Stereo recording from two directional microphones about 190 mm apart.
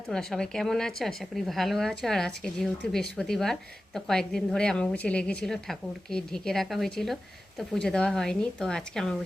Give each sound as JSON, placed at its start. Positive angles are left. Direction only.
{"t": 0.1, "sound": "speech", "side_deg": 5}